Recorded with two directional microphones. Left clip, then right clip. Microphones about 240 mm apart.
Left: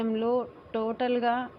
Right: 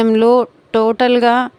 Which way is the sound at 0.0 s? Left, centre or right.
Right.